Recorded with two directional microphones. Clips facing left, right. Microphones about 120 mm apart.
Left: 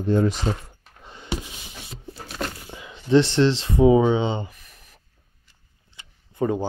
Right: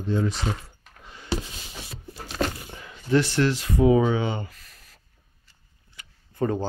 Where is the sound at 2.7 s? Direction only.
15° left (ahead or behind).